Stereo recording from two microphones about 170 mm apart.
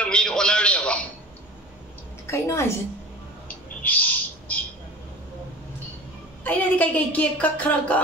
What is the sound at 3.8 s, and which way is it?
Bird, 10° left (ahead or behind).